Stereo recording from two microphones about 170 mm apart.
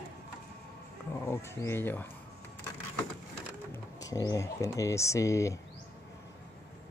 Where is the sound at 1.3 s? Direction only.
15° left (ahead or behind).